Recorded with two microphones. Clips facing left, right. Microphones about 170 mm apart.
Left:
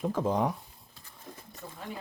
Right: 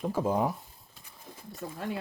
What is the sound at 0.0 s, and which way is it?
Speech, 10° right (ahead or behind).